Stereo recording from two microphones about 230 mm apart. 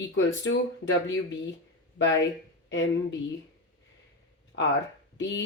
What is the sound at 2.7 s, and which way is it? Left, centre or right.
Speech, left.